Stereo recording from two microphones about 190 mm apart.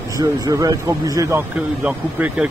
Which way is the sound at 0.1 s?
20° right (ahead or behind).